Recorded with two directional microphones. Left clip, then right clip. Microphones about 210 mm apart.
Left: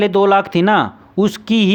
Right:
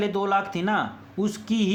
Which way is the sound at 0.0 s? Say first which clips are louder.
Left 11 dB; 50° left (ahead or behind).